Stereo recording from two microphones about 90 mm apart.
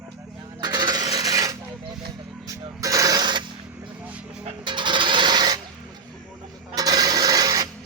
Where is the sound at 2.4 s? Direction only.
40° right (ahead or behind).